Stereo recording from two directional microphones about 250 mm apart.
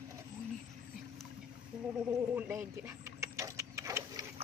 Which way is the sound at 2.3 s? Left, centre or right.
Centre.